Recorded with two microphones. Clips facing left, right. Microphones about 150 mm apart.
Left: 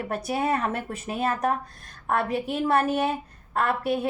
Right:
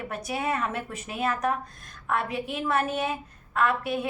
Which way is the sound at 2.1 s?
40° left (ahead or behind).